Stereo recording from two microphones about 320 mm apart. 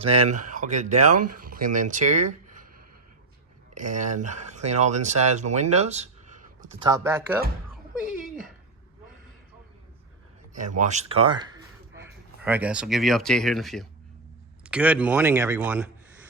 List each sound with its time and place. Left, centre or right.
0.0 s speech: centre
3.8 s speech: right
6.9 s speech: centre
7.9 s a sound: centre
10.5 s speech: right; by 15.9 s centre